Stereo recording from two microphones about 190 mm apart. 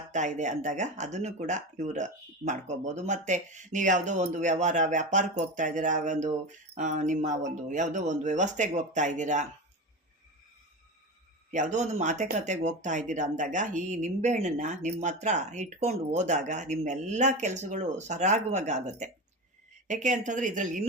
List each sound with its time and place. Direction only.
0.1 s speech: 40° right (ahead or behind)
11.5 s speech: 40° right (ahead or behind)